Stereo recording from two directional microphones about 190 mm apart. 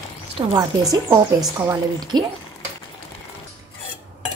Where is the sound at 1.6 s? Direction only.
20° right (ahead or behind).